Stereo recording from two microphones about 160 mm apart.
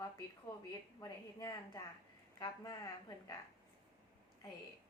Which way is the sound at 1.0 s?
20° left (ahead or behind).